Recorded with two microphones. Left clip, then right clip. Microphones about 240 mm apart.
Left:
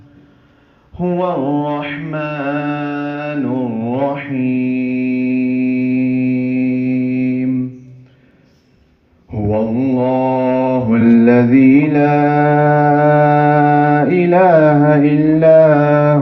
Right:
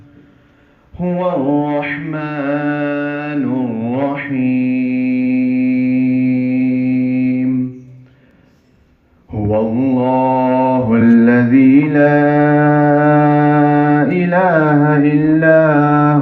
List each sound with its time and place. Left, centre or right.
0.9 s mantra: left
9.3 s mantra: left